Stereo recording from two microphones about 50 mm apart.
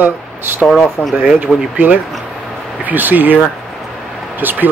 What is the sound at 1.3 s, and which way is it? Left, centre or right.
Speech, right.